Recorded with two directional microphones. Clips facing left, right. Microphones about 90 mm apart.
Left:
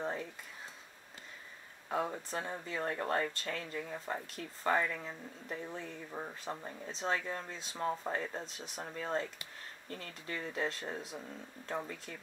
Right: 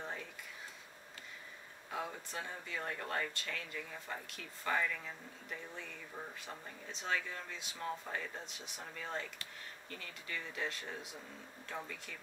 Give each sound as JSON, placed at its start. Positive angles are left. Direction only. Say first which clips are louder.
{"t": 1.9, "sound": "speech", "louder": "left 7 dB", "side_deg": 35}